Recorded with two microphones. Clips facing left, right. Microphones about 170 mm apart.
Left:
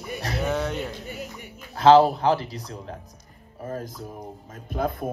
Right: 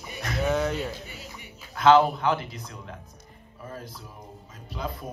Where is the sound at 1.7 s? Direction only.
35° left (ahead or behind).